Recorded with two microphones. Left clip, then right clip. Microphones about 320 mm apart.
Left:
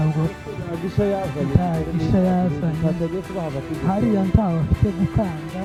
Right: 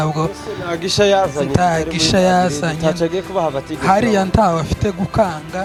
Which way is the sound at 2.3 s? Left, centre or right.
Centre.